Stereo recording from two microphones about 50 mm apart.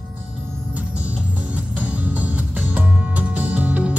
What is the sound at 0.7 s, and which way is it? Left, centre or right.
Music, right.